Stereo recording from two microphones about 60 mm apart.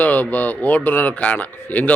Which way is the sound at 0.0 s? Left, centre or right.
Left.